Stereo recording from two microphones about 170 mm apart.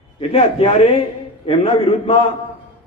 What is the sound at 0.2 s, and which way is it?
A man's voice, 35° left (ahead or behind).